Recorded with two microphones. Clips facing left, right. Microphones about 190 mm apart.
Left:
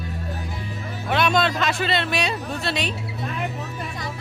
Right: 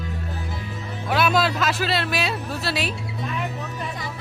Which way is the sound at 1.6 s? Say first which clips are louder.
Even; centre (ahead or behind).